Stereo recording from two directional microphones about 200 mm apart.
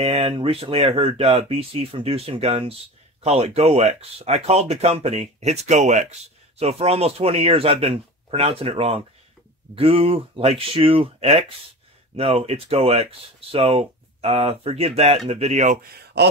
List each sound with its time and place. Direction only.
0.0 s speech: 30° right (ahead or behind)